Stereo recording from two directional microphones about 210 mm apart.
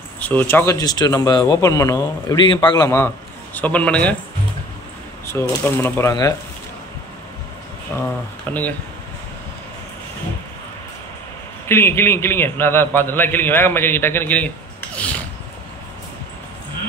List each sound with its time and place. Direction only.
0.2 s a man's voice: 10° left (ahead or behind)
5.3 s a man's voice: 10° left (ahead or behind)
7.9 s a man's voice: 10° left (ahead or behind)
11.6 s a man's voice: 10° left (ahead or behind)
15.0 s a sound: 5° left (ahead or behind)